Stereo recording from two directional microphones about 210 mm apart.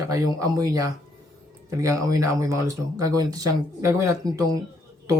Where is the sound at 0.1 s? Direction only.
15° right (ahead or behind).